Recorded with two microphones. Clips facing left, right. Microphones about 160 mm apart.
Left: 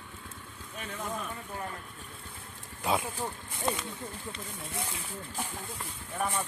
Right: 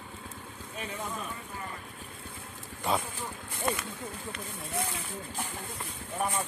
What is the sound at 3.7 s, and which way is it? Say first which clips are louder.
Speech: right 1 dB; 25° left (ahead or behind).